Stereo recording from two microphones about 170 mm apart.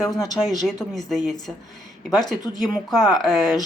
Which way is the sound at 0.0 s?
20° left (ahead or behind).